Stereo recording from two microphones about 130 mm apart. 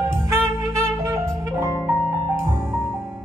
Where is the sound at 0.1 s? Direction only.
20° right (ahead or behind).